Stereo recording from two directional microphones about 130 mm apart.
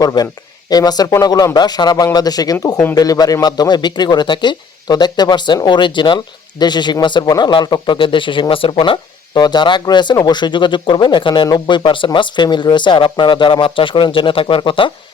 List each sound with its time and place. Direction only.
0.0 s speech: 30° left (ahead or behind)